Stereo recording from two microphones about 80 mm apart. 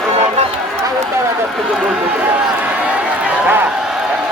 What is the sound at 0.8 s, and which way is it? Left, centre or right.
Run, right.